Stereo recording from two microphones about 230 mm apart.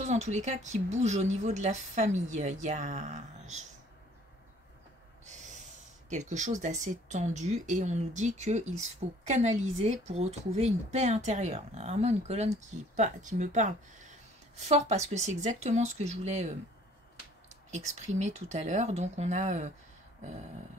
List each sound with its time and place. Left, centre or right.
0.0 s speech: right
5.2 s snort: right
6.0 s speech: right
17.6 s speech: right